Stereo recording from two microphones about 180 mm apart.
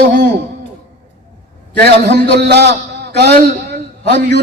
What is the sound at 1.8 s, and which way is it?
A man's voice, 65° right (ahead or behind).